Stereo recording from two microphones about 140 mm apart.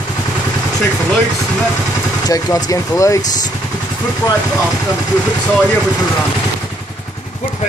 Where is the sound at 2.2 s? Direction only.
25° left (ahead or behind).